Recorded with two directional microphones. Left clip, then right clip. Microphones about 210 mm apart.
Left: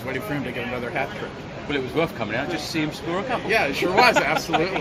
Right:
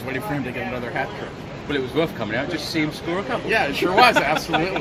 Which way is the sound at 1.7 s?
Centre (ahead or behind).